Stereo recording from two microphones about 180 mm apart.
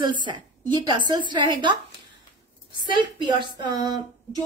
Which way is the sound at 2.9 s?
25° right (ahead or behind).